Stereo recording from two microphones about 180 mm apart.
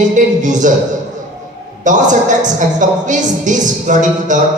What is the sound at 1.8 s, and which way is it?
A man's voice, 45° right (ahead or behind).